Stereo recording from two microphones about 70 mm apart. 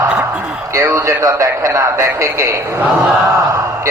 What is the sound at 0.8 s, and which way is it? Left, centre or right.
A man's voice, right.